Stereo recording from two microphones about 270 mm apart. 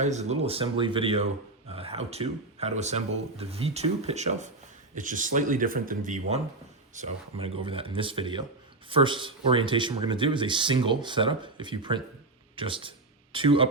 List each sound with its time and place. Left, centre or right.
0.0 s speech: right